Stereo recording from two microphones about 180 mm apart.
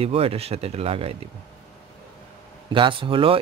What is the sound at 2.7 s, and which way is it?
Speech, 25° right (ahead or behind).